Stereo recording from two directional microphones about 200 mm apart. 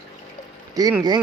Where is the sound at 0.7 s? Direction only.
20° right (ahead or behind).